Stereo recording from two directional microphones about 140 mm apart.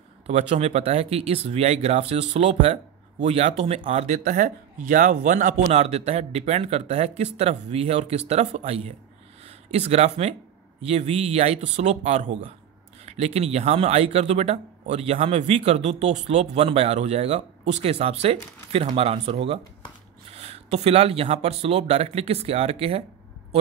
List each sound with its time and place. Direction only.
0.3 s speech: 50° right (ahead or behind)
5.7 s speech: 50° right (ahead or behind)